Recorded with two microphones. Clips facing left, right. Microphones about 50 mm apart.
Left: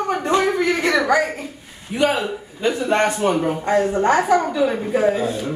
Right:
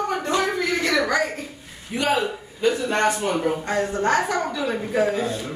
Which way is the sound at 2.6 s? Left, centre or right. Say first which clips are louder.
Left 2 dB; left.